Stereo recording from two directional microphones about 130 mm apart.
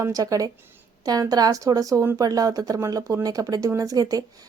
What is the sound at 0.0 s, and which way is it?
Speech, 25° right (ahead or behind).